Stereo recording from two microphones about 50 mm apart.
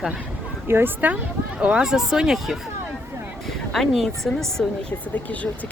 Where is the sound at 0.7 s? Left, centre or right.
Right.